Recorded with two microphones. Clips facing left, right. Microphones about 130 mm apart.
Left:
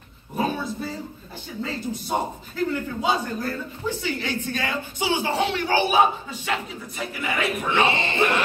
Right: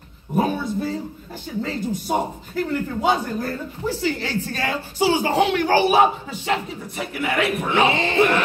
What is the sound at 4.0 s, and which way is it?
A man's voice, 35° right (ahead or behind).